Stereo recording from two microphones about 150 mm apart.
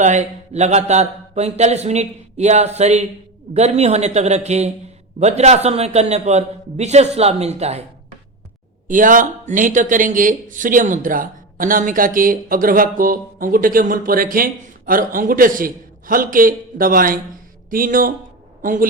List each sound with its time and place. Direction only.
0.0 s speech: 50° right (ahead or behind)
8.9 s speech: 60° right (ahead or behind)